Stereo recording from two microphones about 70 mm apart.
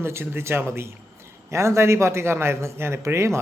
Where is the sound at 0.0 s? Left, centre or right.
Right.